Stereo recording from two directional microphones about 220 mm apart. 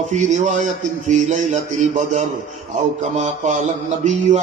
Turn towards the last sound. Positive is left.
turn(degrees=-35)  # may be behind; listen again after turning